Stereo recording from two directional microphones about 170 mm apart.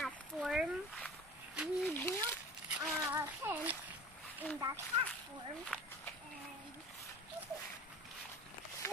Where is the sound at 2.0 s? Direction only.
15° left (ahead or behind).